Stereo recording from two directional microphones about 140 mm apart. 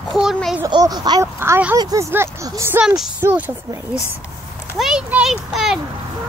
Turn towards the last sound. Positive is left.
turn(degrees=-5)  # may be behind; listen again after turning